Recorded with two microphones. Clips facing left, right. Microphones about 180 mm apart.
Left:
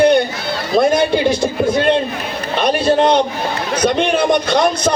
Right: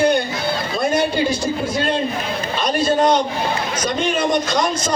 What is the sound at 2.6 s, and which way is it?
A man's voice, 65° left (ahead or behind).